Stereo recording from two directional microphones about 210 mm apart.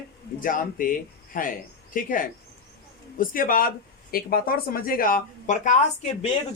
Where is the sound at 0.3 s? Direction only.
40° left (ahead or behind).